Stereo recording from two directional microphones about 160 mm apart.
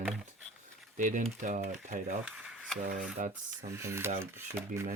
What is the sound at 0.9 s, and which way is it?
Speech, 55° right (ahead or behind).